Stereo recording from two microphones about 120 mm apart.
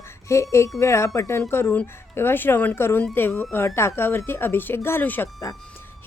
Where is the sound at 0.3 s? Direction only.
25° left (ahead or behind).